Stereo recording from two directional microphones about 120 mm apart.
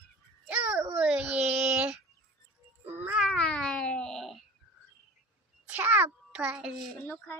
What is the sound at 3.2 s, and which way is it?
Cat, 5° left (ahead or behind).